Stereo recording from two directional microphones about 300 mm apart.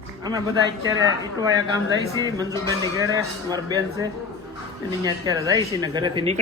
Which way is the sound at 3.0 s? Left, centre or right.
Centre.